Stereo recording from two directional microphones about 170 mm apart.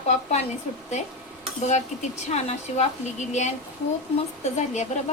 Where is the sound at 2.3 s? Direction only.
40° left (ahead or behind).